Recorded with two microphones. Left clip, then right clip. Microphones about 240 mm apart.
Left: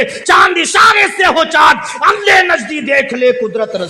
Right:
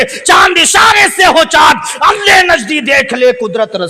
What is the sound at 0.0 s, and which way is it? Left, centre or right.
Speech, right.